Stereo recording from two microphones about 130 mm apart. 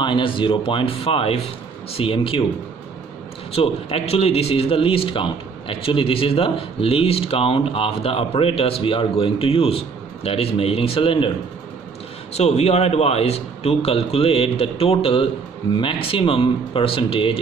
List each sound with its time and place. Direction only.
0.0 s a man's voice: 40° left (ahead or behind)
3.5 s a man's voice: 50° left (ahead or behind)
12.4 s a man's voice: 55° left (ahead or behind)